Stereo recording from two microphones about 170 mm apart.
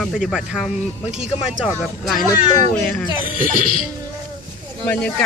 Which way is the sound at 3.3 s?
55° right (ahead or behind).